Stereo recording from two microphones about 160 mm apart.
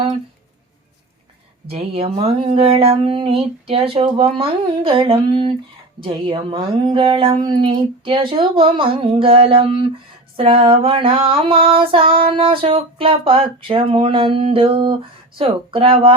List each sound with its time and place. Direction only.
1.6 s speech: 35° right (ahead or behind)